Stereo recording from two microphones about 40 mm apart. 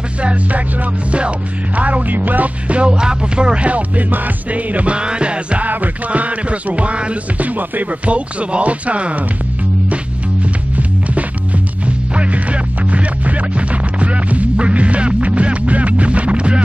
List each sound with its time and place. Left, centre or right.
0.2 s music: right
1.8 s music: right
2.7 s music: right
4.9 s music: right
5.7 s music: right
8.0 s music: right
12.2 s music: right